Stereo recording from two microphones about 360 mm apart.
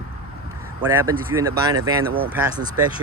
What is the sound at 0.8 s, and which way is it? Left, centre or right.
Speech, centre.